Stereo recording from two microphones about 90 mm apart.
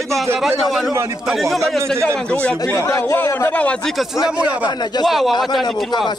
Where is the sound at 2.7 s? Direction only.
35° left (ahead or behind).